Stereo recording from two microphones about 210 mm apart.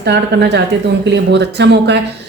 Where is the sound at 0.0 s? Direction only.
50° right (ahead or behind).